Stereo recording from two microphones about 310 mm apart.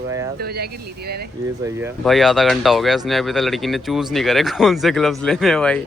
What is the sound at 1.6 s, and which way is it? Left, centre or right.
Speech, centre.